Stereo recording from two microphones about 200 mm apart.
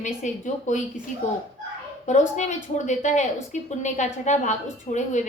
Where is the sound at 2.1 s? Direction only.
35° left (ahead or behind).